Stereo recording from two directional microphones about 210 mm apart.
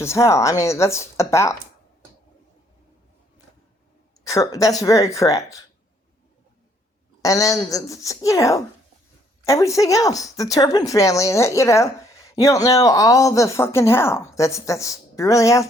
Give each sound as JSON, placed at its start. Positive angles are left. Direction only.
{"t": 0.0, "sound": "speech", "side_deg": 15}
{"t": 4.2, "sound": "speech", "side_deg": 15}
{"t": 7.2, "sound": "speech", "side_deg": 15}